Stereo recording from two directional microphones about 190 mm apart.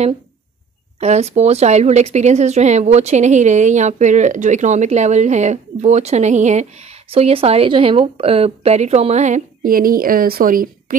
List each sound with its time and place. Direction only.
0.9 s speech: 35° right (ahead or behind)